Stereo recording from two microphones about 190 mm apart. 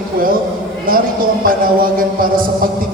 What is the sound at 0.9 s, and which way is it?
Speech, 50° right (ahead or behind).